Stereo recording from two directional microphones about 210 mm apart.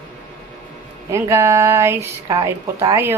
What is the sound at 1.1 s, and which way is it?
A woman's voice, 15° right (ahead or behind).